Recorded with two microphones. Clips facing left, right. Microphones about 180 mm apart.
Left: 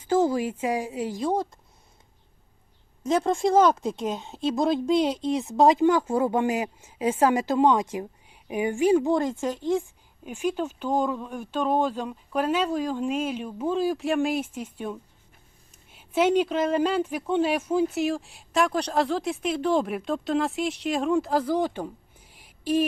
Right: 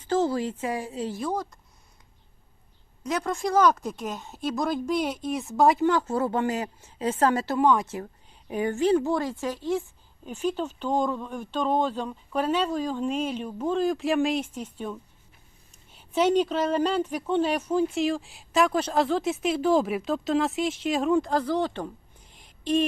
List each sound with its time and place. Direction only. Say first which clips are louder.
0.0 s speech: left 2 dB; 10° left (ahead or behind)
1.2 s speech: left 6 dB; 25° left (ahead or behind)
3.0 s speech: left 5 dB; 25° left (ahead or behind); by 22.9 s 10° left (ahead or behind)